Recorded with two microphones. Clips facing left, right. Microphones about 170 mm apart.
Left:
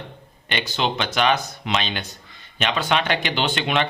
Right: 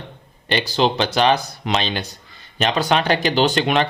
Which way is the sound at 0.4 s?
35° right (ahead or behind).